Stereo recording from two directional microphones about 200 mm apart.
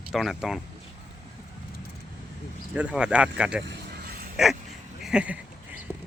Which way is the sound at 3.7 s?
50° right (ahead or behind).